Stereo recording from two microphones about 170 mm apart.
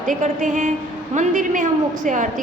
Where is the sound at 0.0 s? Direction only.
45° right (ahead or behind).